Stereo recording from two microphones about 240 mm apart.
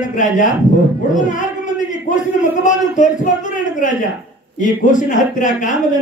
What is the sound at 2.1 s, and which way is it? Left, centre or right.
A man's voice, left.